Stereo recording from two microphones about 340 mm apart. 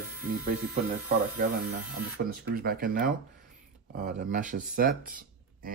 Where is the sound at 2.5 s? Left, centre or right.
Right.